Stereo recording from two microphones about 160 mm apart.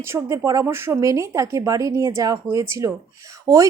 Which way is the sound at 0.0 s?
15° right (ahead or behind).